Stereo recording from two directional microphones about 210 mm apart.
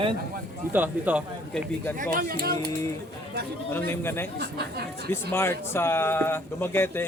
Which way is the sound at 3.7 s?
10° left (ahead or behind).